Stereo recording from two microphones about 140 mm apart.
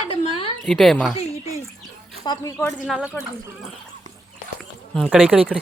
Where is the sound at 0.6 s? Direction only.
Centre (ahead or behind).